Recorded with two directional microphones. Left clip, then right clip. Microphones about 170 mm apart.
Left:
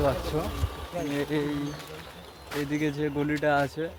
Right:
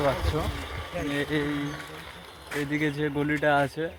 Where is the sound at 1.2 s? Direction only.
15° right (ahead or behind).